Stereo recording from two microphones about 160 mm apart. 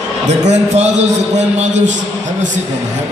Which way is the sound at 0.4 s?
45° right (ahead or behind).